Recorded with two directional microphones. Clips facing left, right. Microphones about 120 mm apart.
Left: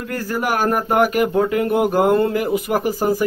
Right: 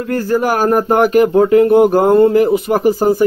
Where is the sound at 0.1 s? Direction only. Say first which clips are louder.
Right 7 dB; 30° right (ahead or behind).